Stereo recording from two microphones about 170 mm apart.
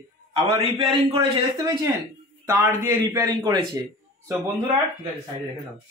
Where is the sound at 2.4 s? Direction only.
15° right (ahead or behind).